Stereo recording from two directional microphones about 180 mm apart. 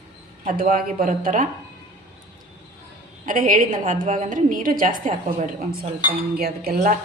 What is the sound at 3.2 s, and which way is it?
A woman's voice, 45° right (ahead or behind).